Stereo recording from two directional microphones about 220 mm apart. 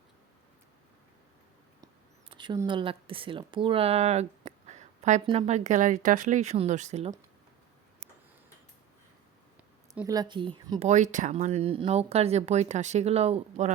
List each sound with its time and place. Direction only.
2.3 s speech: 20° right (ahead or behind)
10.1 s speech: 20° right (ahead or behind)